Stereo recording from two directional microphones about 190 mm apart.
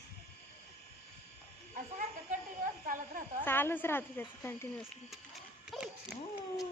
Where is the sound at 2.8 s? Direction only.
45° right (ahead or behind).